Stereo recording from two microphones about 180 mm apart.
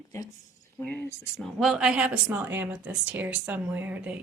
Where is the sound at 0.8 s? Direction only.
10° left (ahead or behind).